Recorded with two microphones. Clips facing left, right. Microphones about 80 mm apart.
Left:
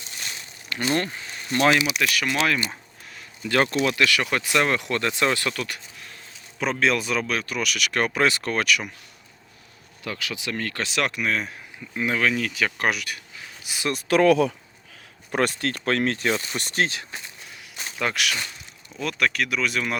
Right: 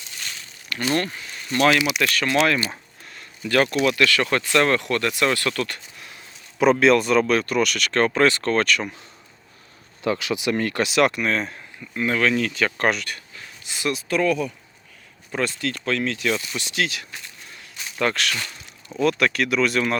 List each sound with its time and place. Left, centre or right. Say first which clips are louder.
0.2 s crumpling: even; left
0.9 s speech: right 1 dB; centre
1.2 s a sound: right 2 dB; left
2.0 s speech: right 2 dB; centre
2.6 s a sound: right 2 dB; centre
3.5 s speech: right 2 dB; left
6.6 s speech: right 7 dB; centre
10.0 s speech: right 8 dB; right
10.8 s speech: right 5 dB; centre
14.1 s speech: left 5 dB; left
15.3 s speech: left 2 dB; left
16.6 s speech: left 1 dB; left
17.9 s speech: right 3 dB; centre